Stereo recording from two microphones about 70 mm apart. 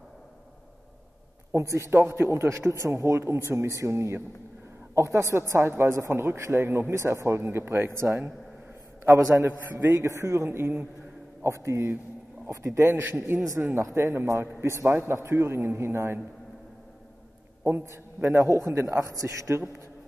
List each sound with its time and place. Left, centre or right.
1.5 s a man's voice: right
11.4 s a man's voice: right
17.8 s a man's voice: right